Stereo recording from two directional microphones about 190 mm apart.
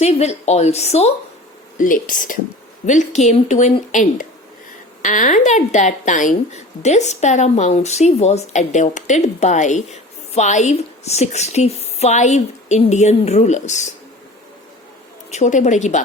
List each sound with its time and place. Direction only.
0.0 s a woman's voice: 35° left (ahead or behind)
15.3 s a woman's voice: 40° left (ahead or behind)